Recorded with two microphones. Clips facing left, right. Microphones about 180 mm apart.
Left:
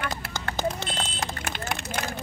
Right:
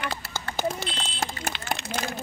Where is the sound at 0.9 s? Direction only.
45° left (ahead or behind).